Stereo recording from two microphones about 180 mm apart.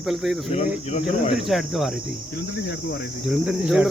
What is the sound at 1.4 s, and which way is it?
Speech, centre (ahead or behind).